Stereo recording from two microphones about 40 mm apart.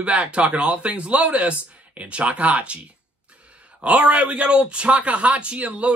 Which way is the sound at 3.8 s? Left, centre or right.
Right.